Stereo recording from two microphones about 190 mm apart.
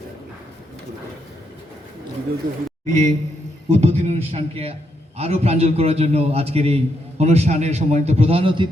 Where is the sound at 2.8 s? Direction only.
40° right (ahead or behind).